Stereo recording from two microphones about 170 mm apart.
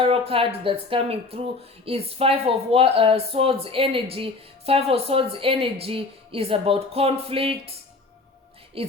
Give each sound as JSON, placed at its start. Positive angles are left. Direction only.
{"t": 0.0, "sound": "speech", "side_deg": -35}
{"t": 8.8, "sound": "speech", "side_deg": -35}